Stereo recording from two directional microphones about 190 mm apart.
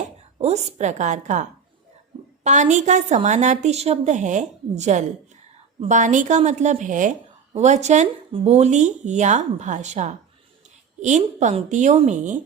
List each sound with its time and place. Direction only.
0.3 s a woman's voice: 35° right (ahead or behind)